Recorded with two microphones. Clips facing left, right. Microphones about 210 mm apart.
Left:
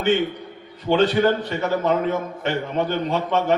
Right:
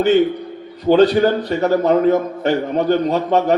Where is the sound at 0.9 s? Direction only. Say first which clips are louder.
Right 5 dB; 40° right (ahead or behind).